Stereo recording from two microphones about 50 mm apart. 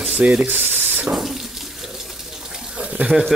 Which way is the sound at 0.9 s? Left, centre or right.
Right.